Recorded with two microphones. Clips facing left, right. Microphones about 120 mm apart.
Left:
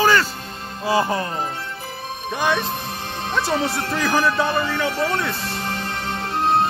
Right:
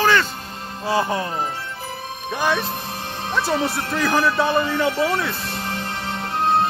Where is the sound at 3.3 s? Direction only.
Centre (ahead or behind).